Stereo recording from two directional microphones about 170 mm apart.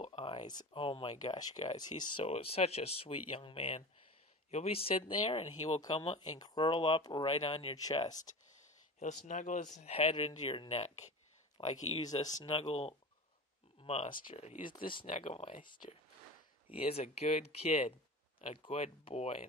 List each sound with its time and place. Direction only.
0.0 s speech: 35° left (ahead or behind)
6.3 s speech: 25° left (ahead or behind)
7.7 s speech: 20° left (ahead or behind)
9.0 s speech: 45° left (ahead or behind); by 12.4 s 20° left (ahead or behind)
12.4 s speech: 35° left (ahead or behind)
14.9 s speech: 30° left (ahead or behind)
15.1 s speech: 40° left (ahead or behind)